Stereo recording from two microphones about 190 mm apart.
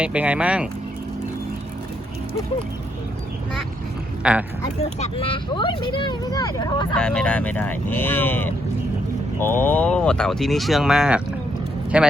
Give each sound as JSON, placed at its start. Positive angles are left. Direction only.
{"t": 0.0, "sound": "speech", "side_deg": -5}
{"t": 4.2, "sound": "speech", "side_deg": -5}
{"t": 4.8, "sound": "speech", "side_deg": 35}
{"t": 6.9, "sound": "speech", "side_deg": 5}